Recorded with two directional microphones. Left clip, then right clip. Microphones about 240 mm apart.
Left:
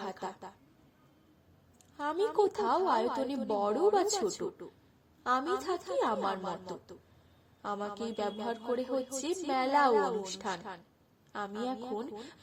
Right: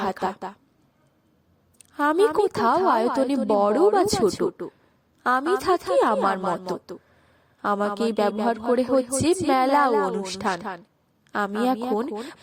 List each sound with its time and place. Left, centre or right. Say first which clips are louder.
0.0 s a woman's voice: right 14 dB; right
1.9 s a woman's voice: right 13 dB; right